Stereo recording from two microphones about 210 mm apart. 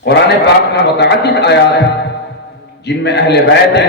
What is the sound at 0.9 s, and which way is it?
Speech, 55° left (ahead or behind).